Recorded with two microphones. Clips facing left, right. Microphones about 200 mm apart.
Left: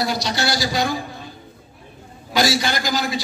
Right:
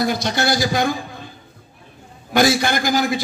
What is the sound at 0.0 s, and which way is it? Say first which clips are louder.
Speech: right 3 dB; 50° right (ahead or behind).